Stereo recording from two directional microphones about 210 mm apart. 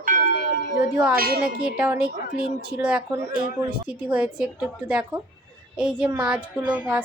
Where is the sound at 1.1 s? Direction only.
45° right (ahead or behind).